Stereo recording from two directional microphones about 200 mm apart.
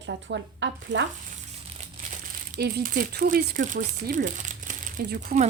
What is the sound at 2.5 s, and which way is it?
Speech, 50° right (ahead or behind).